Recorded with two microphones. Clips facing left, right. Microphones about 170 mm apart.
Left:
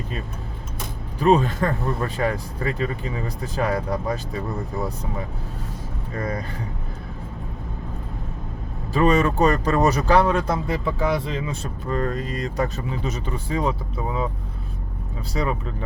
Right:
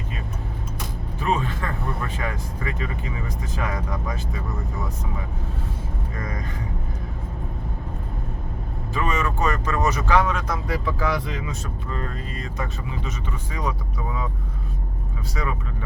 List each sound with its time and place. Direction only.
1.2 s speech: 35° left (ahead or behind)
6.1 s speech: 35° left (ahead or behind)
8.9 s speech: 35° left (ahead or behind)